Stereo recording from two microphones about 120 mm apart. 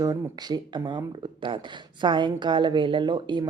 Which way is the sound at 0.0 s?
35° right (ahead or behind).